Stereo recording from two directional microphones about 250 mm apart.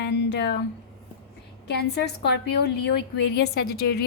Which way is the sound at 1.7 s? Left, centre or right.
Left.